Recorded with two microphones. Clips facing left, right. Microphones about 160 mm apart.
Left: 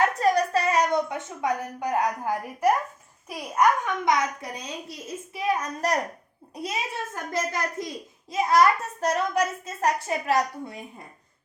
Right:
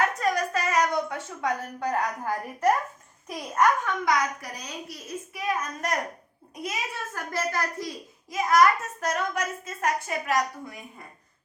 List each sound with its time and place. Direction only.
0.2 s a sound: 30° left (ahead or behind)
1.4 s a woman's voice: 15° left (ahead or behind)
4.0 s a child's voice: 25° left (ahead or behind)